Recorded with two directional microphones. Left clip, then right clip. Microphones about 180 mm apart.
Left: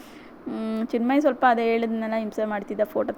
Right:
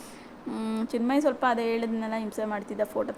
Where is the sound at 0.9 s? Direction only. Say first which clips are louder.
Left 4 dB; 10° left (ahead or behind).